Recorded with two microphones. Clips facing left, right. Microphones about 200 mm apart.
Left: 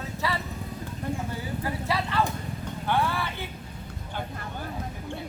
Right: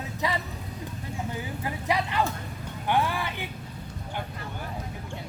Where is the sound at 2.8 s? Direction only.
15° right (ahead or behind).